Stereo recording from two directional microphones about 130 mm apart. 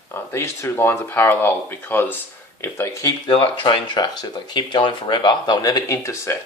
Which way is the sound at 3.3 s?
40° left (ahead or behind).